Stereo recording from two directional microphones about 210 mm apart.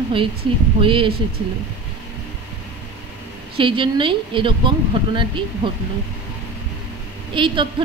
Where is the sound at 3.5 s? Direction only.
25° right (ahead or behind).